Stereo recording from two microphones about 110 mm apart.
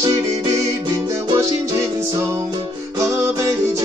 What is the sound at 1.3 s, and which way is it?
Music, 30° right (ahead or behind).